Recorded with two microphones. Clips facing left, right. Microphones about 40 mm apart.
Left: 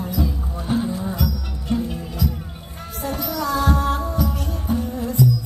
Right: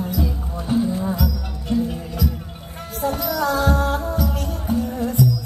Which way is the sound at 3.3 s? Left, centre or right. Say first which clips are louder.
Even; right.